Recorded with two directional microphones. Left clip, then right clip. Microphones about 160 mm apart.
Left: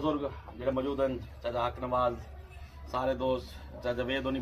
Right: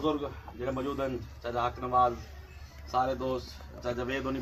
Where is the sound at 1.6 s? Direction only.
40° left (ahead or behind).